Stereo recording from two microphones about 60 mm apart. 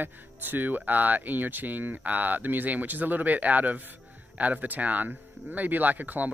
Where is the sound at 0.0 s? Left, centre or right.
Right.